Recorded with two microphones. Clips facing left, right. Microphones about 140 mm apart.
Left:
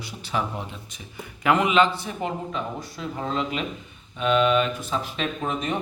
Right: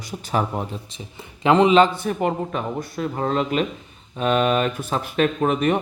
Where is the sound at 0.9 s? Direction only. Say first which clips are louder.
Right 1 dB; 25° right (ahead or behind).